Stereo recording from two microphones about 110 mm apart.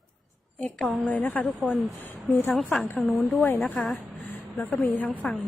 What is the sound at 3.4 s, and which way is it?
A woman's voice, 15° left (ahead or behind).